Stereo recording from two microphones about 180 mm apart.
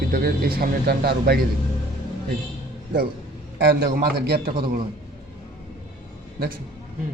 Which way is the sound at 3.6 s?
65° right (ahead or behind).